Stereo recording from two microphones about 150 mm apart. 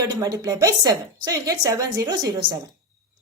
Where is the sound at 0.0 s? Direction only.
25° right (ahead or behind).